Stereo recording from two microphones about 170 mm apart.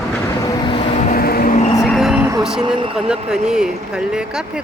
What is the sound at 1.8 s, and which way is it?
Vehicle, centre (ahead or behind).